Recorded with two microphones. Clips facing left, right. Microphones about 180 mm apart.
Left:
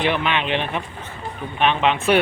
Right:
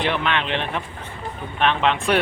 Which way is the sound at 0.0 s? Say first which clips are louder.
Left 1 dB; 5° left (ahead or behind).